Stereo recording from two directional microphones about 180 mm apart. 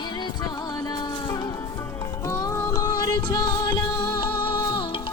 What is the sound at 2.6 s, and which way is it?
Music, 20° left (ahead or behind).